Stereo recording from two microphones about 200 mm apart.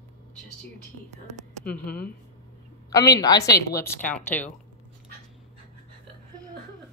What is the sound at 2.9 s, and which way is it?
A woman's voice, 20° left (ahead or behind).